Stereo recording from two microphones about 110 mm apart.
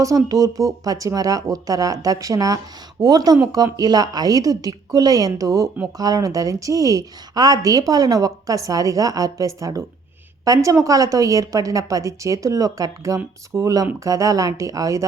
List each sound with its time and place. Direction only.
0.3 s a woman's voice: 30° right (ahead or behind)